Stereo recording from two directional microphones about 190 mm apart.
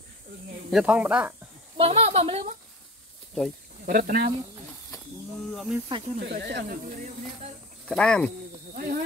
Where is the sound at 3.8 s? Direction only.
50° right (ahead or behind).